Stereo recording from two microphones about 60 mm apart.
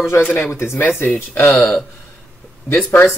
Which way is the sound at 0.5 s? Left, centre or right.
Left.